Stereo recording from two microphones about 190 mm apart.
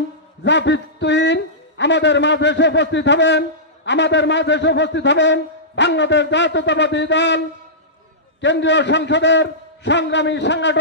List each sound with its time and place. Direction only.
0.4 s a man's voice: 70° left (ahead or behind)